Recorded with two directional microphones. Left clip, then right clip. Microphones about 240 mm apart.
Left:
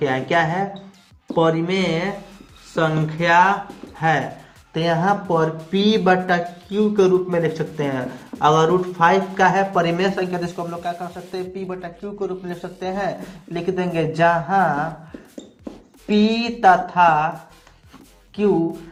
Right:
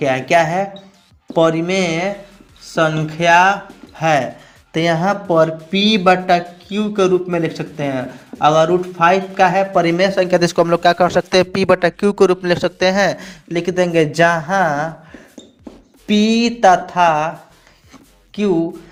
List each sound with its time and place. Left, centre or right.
0.0 s speech: right
4.7 s speech: right
16.0 s speech: right